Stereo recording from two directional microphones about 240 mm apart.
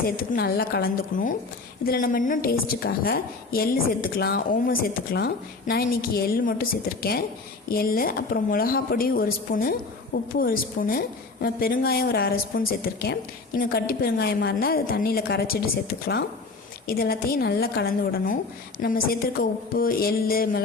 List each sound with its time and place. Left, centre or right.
0.0 s a woman's voice: left